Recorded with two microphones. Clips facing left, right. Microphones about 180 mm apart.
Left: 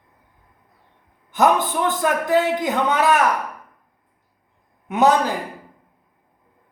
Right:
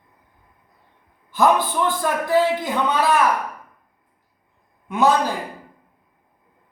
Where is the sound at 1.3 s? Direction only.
20° left (ahead or behind).